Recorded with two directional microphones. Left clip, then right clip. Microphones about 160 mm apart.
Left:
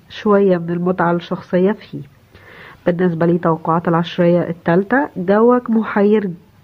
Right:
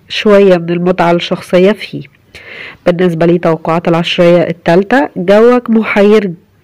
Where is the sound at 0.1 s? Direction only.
25° right (ahead or behind).